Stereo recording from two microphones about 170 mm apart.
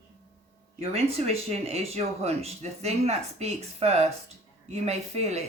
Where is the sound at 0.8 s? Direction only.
35° right (ahead or behind).